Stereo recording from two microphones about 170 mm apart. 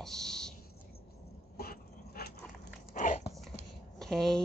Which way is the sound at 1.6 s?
65° left (ahead or behind).